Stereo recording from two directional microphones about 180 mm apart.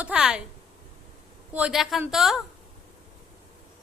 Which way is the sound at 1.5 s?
5° right (ahead or behind).